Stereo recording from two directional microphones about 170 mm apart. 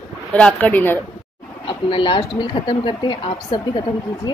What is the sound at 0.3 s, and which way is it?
Speech, 5° left (ahead or behind).